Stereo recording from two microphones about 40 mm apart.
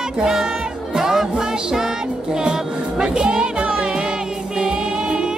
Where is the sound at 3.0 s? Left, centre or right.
Right.